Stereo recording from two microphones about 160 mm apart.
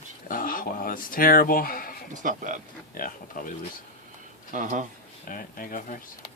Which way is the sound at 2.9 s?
60° left (ahead or behind).